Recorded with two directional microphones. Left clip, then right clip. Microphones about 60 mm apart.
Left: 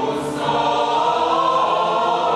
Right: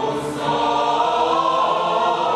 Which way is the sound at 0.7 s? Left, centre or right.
Centre.